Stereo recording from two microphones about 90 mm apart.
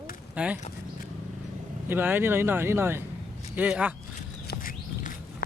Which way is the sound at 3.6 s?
15° right (ahead or behind).